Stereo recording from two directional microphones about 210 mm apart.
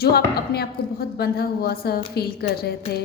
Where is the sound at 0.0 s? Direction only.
50° left (ahead or behind).